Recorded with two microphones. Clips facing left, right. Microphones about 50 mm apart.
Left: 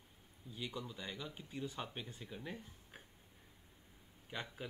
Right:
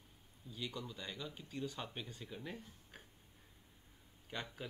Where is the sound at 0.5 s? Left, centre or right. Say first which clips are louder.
Even; centre.